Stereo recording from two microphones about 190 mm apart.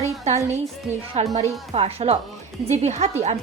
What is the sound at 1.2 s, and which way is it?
A woman's voice, 35° right (ahead or behind).